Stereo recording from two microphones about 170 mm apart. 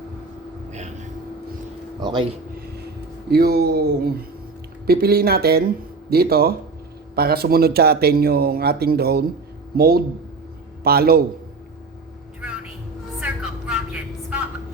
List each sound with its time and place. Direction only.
0.7 s vehicle: 45° right (ahead or behind)
2.0 s speech: 25° right (ahead or behind)
3.2 s speech: 65° right (ahead or behind)
13.1 s a sound: 5° right (ahead or behind)